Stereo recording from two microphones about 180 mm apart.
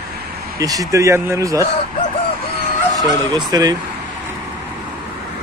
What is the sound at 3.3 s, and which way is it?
Speech, 20° right (ahead or behind).